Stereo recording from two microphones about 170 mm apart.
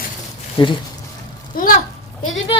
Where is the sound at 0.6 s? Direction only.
30° left (ahead or behind).